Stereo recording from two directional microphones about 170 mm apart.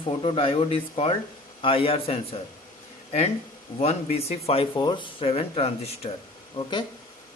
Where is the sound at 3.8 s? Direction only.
35° left (ahead or behind).